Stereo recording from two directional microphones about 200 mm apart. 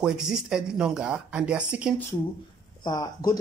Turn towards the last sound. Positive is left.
turn(degrees=20)  # may be behind; listen again after turning